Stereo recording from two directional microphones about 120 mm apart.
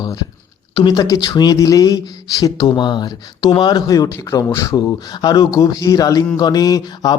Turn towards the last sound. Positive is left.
turn(degrees=35)  # may be behind; listen again after turning